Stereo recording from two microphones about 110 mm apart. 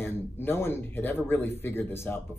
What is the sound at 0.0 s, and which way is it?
A man's voice, 20° left (ahead or behind).